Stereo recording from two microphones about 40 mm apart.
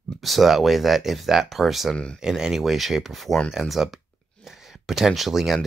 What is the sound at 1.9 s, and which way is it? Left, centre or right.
Speech, left.